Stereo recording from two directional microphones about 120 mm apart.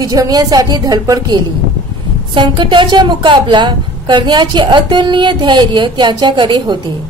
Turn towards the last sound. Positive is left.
turn(degrees=-40)  # may be behind; listen again after turning